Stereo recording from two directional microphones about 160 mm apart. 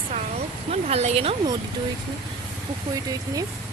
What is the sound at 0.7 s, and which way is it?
Speech, 40° right (ahead or behind).